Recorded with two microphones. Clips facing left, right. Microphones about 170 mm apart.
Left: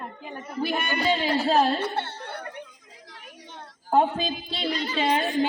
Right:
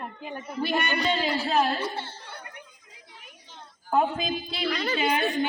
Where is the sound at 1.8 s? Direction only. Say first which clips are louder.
Left 4 dB; 65° left (ahead or behind).